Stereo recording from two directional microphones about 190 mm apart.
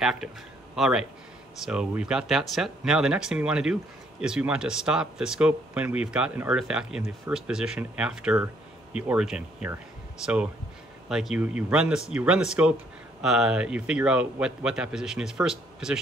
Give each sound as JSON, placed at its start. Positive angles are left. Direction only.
{"t": 0.0, "sound": "a man's voice", "side_deg": -5}